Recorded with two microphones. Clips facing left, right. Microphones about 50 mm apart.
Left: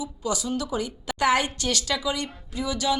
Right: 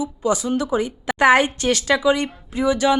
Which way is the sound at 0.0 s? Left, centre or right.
Right.